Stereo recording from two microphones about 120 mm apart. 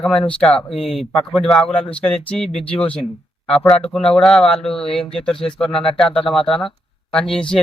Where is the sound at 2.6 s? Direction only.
55° left (ahead or behind).